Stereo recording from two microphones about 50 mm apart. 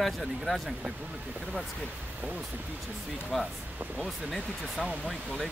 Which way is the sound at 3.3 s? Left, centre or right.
Centre.